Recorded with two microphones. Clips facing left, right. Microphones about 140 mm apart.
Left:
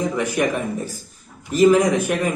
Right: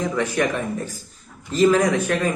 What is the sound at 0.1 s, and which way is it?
Speech, 15° left (ahead or behind).